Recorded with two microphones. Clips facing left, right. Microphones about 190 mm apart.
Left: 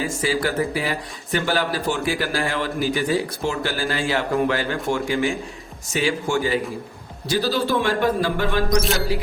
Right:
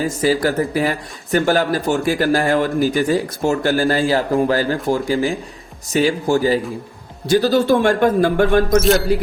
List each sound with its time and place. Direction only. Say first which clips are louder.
0.0 s speech: right 6 dB; 40° right (ahead or behind)
7.3 s speech: right 7 dB; 50° right (ahead or behind)
8.8 s speech: right 8 dB; centre (ahead or behind)